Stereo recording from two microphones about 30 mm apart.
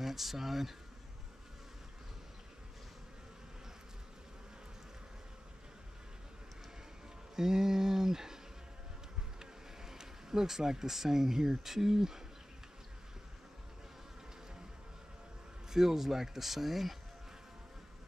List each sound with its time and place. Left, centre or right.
0.0 s speech: centre
7.3 s a sound: centre
9.4 s speech: centre
15.7 s speech: centre